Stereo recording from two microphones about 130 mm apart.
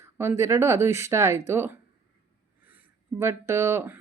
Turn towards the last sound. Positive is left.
turn(degrees=-15)  # may be behind; listen again after turning